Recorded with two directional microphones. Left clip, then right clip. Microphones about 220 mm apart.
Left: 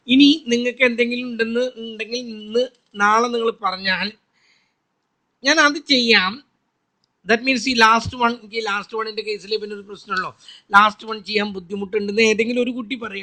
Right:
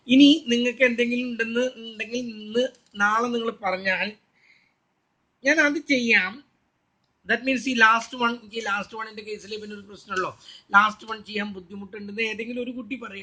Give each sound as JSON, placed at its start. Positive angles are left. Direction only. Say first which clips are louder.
{"t": 0.0, "sound": "speech", "louder": "left 2 dB", "side_deg": 45}